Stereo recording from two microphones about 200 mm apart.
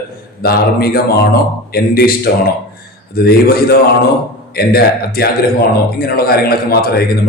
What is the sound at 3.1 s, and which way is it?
A man's voice, 50° left (ahead or behind).